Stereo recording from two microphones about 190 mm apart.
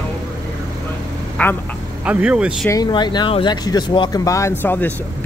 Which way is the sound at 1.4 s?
10° left (ahead or behind).